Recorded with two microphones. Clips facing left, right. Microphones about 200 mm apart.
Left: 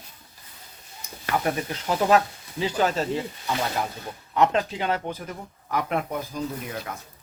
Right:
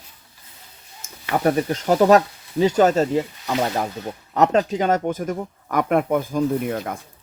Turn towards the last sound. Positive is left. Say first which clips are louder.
# right 10 dB
turn(degrees=-50)  # may be behind; listen again after turning